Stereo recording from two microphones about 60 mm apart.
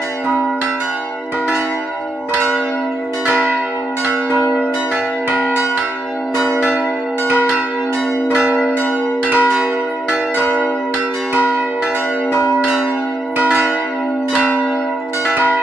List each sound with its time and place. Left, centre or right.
3.3 s church bell: right
5.3 s church bell: right
8.3 s church bell: centre
11.3 s change ringing: right
13.4 s church bell: right